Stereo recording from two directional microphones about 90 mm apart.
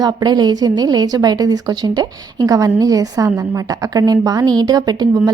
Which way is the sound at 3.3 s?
30° right (ahead or behind).